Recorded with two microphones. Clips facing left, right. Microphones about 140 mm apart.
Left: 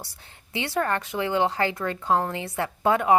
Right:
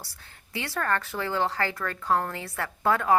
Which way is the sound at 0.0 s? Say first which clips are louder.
Left 4 dB; 20° left (ahead or behind).